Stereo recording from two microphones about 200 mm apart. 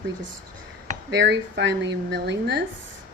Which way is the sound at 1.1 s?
60° right (ahead or behind).